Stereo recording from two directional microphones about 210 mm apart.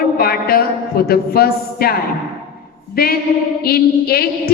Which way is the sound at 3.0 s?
45° left (ahead or behind).